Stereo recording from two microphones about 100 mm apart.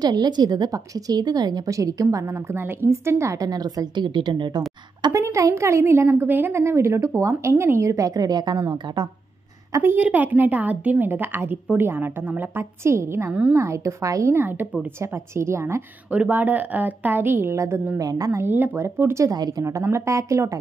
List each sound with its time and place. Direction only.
0.0 s a woman's voice: 45° right (ahead or behind)
5.1 s a woman's voice: 30° right (ahead or behind)
9.7 s a woman's voice: 30° right (ahead or behind)
9.9 s a woman's voice: 15° right (ahead or behind)
13.3 s a woman's voice: 10° right (ahead or behind)
13.6 s a woman's voice: 30° right (ahead or behind)
16.1 s a woman's voice: 15° right (ahead or behind); by 18.4 s 35° right (ahead or behind)
18.4 s a woman's voice: 25° right (ahead or behind)
19.3 s a woman's voice: 45° right (ahead or behind)
19.6 s a woman's voice: 30° right (ahead or behind)